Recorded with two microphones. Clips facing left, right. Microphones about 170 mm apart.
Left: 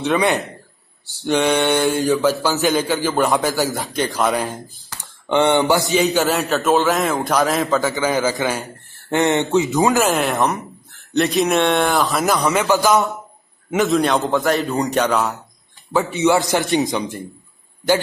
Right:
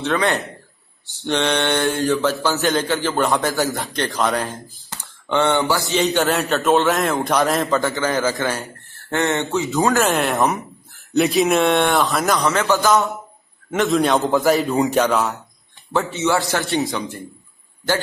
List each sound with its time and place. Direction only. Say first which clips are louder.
0.0 s a man's voice: left 2 dB; 15° left (ahead or behind)
5.9 s a man's voice: left 1 dB; 5° left (ahead or behind)
10.0 s a man's voice: even; centre (ahead or behind)
12.4 s a man's voice: left 1 dB; 15° left (ahead or behind)
13.7 s a man's voice: left 1 dB; 5° left (ahead or behind)
16.1 s a man's voice: left 5 dB; 15° left (ahead or behind)